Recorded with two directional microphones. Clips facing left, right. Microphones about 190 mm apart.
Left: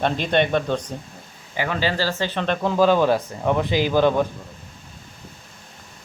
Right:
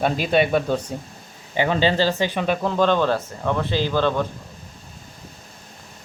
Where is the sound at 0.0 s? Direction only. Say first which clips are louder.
Right 1 dB; 5° right (ahead or behind).